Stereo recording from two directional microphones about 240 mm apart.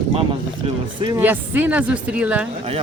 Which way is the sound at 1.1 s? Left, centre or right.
Centre.